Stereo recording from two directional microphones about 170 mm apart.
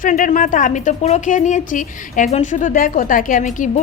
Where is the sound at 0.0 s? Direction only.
50° left (ahead or behind).